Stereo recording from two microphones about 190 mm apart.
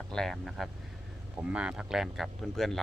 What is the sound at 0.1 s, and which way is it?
Speech, centre (ahead or behind).